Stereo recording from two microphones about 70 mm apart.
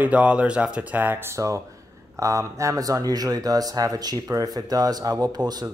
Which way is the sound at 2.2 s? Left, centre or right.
Right.